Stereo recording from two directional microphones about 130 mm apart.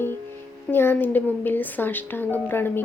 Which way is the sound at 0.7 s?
15° left (ahead or behind).